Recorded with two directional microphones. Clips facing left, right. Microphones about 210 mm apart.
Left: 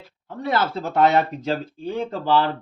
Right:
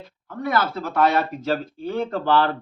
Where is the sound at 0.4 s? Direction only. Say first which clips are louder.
Even; 25° left (ahead or behind).